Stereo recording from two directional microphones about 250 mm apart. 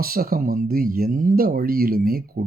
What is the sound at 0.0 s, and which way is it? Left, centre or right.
Speech, right.